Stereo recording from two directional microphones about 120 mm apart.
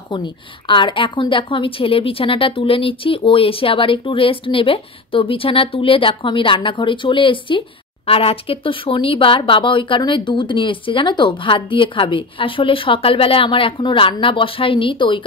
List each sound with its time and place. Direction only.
0.1 s a woman's voice: 40° left (ahead or behind)